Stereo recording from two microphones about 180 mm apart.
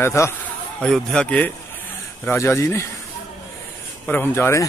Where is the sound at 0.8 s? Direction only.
5° left (ahead or behind).